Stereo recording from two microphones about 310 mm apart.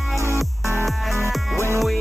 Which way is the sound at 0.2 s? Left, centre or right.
Centre.